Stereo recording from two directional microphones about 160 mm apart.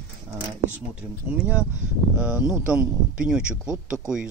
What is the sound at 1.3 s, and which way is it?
A man's voice, 10° right (ahead or behind).